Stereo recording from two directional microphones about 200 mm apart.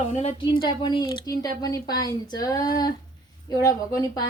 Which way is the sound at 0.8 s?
20° left (ahead or behind).